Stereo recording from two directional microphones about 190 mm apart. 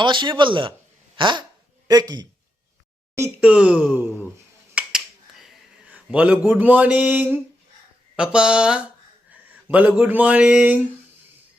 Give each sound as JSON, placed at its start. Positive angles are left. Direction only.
{"t": 0.0, "sound": "a man's voice", "side_deg": -25}
{"t": 3.2, "sound": "speech", "side_deg": -10}
{"t": 4.7, "sound": "finger snapping", "side_deg": -5}
{"t": 8.1, "sound": "speech", "side_deg": -5}